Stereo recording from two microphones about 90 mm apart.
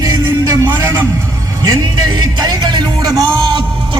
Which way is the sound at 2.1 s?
50° right (ahead or behind).